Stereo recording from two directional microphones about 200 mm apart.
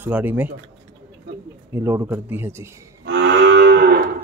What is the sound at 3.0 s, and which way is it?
Moo, 65° right (ahead or behind).